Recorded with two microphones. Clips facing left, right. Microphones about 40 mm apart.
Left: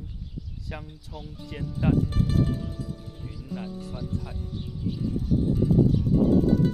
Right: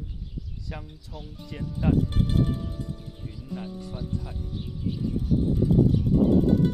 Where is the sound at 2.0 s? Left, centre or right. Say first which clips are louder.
Even; right.